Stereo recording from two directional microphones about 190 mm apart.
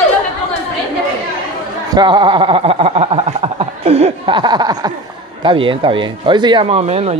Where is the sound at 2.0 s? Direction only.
25° right (ahead or behind).